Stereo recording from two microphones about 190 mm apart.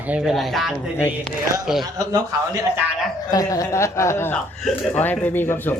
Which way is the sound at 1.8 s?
20° right (ahead or behind).